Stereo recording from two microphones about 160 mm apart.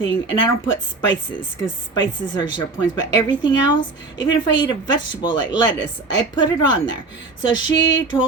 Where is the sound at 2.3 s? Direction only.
30° left (ahead or behind).